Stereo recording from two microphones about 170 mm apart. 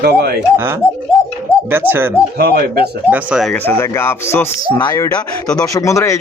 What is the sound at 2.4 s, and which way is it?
Speech, 65° right (ahead or behind).